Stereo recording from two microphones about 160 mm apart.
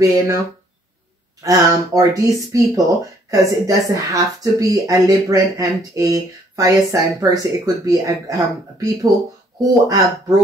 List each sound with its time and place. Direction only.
0.0 s speech: 20° right (ahead or behind)
1.4 s speech: 20° right (ahead or behind)